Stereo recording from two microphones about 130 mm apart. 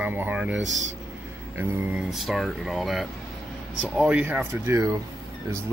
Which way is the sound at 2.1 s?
Centre (ahead or behind).